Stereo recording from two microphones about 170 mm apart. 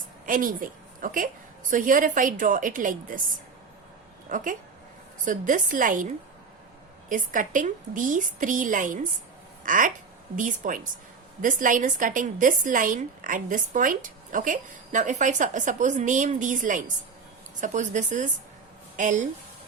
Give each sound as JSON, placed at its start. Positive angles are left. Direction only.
{"t": 0.3, "sound": "a woman's voice", "side_deg": -55}
{"t": 4.3, "sound": "speech", "side_deg": -50}
{"t": 7.1, "sound": "speech", "side_deg": -50}